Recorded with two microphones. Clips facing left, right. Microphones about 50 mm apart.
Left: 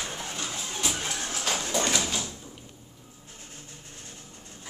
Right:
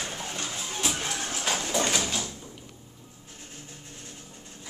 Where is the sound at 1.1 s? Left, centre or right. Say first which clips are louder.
Right 1 dB; centre.